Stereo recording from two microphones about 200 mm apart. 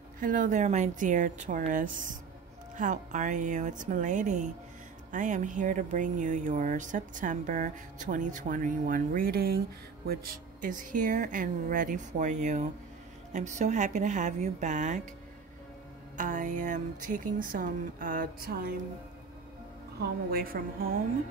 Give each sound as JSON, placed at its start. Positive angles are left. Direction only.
{"t": 0.2, "sound": "speech", "side_deg": -40}
{"t": 16.2, "sound": "speech", "side_deg": -40}
{"t": 20.0, "sound": "a woman's voice", "side_deg": -50}